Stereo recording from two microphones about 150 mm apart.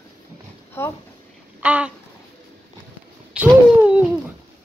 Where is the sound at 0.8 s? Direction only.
15° left (ahead or behind).